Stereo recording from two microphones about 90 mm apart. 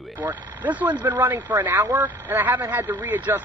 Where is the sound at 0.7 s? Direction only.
15° right (ahead or behind).